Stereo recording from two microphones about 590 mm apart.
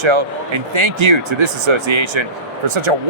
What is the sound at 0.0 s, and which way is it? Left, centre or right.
Speech, right.